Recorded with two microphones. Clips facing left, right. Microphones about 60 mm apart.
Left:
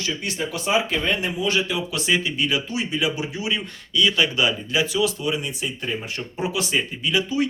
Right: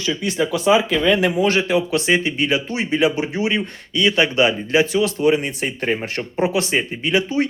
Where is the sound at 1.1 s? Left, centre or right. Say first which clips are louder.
Right 7 dB; right.